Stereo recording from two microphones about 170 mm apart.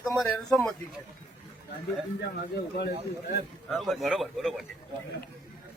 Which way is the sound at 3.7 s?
Centre (ahead or behind).